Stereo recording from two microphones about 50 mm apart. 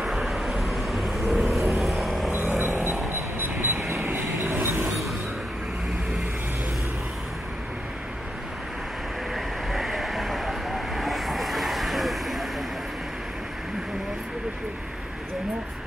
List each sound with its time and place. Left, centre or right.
0.0 s vehicle: centre
2.3 s vehicle: right
4.4 s train: right
9.3 s vehicle: centre